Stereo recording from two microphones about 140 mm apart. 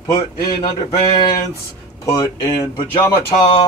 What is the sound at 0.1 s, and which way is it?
Speech, 35° left (ahead or behind).